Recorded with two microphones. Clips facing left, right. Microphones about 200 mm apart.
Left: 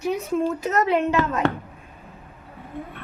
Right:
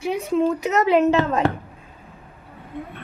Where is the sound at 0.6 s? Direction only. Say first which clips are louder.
Right 3 dB; 80° right.